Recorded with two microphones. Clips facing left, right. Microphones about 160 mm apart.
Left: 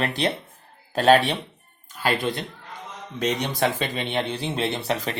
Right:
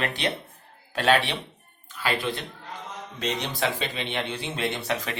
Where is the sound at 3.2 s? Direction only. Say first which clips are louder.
Left 5 dB; 45° left (ahead or behind).